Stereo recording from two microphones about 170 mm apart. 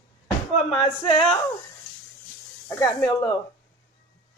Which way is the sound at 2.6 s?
20° left (ahead or behind).